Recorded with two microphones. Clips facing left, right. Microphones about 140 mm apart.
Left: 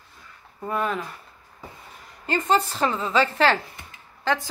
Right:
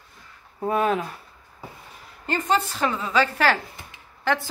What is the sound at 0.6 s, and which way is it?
Speech, 10° right (ahead or behind).